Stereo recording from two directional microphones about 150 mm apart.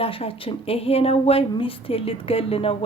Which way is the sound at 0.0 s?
40° left (ahead or behind).